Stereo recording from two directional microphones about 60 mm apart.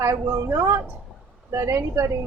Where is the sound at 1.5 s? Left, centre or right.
Right.